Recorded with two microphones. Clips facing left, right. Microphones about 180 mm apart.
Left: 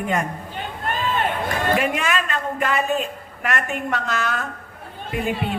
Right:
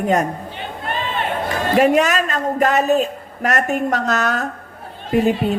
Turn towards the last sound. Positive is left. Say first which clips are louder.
# right 8 dB
turn(degrees=-40)  # may be behind; listen again after turning